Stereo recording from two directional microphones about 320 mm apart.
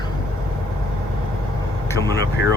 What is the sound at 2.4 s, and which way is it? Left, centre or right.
Speech, left.